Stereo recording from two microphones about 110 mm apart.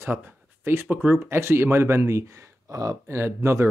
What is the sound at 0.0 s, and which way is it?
Speech, 20° right (ahead or behind).